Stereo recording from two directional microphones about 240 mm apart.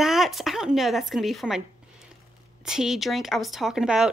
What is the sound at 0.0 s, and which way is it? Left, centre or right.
Speech, centre.